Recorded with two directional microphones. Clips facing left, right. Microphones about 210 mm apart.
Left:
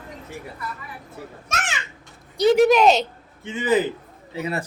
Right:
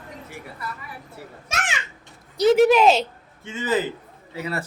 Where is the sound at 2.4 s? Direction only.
Centre (ahead or behind).